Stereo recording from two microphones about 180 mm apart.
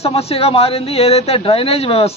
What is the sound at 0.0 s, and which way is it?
Speech, 35° left (ahead or behind).